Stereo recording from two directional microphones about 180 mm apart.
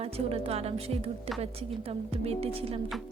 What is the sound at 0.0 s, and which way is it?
Speech, 35° right (ahead or behind).